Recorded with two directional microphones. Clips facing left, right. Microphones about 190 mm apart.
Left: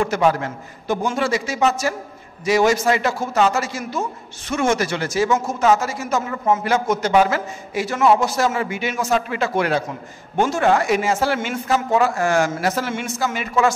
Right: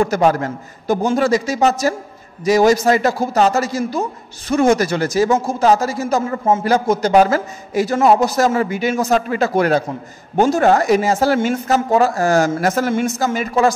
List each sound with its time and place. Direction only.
0.0 s a man's voice: 40° right (ahead or behind)